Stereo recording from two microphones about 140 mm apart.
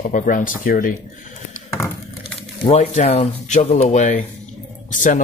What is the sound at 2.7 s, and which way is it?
Speech, 50° left (ahead or behind).